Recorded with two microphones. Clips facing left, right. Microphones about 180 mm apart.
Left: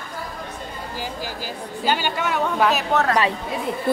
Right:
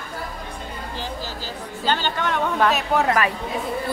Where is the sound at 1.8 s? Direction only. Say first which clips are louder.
Left 1 dB; 10° left (ahead or behind).